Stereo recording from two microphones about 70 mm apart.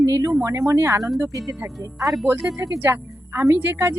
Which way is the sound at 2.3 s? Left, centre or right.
Right.